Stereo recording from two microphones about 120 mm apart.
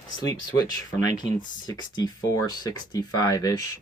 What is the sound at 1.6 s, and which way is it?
Speech, 35° left (ahead or behind).